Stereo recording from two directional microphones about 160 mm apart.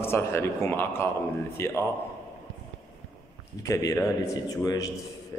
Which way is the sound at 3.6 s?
20° left (ahead or behind).